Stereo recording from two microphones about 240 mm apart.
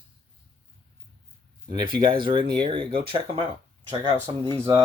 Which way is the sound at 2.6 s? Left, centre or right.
Right.